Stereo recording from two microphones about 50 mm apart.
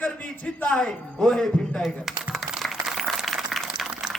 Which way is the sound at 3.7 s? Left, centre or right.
Centre.